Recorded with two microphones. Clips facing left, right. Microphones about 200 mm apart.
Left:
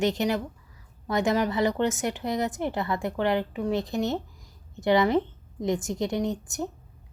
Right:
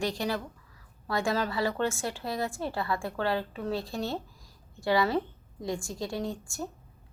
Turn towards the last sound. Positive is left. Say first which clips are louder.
# left 5 dB
turn(degrees=20)  # may be behind; listen again after turning